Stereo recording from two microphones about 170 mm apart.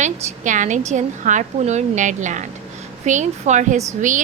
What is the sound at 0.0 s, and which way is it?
A woman's voice, 45° right (ahead or behind).